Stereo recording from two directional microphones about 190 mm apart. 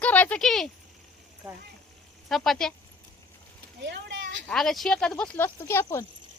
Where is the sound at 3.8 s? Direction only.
65° right (ahead or behind).